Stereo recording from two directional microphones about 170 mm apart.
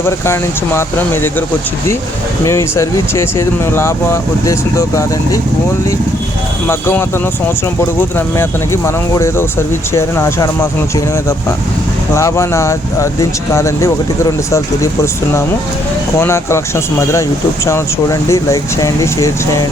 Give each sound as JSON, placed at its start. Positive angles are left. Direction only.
{"t": 0.0, "sound": "speech", "side_deg": 15}
{"t": 6.7, "sound": "speech", "side_deg": 15}